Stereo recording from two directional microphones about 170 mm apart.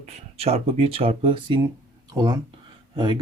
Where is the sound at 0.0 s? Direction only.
35° right (ahead or behind).